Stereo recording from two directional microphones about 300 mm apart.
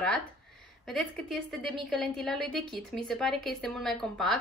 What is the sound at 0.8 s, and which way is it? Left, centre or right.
A woman's voice, centre.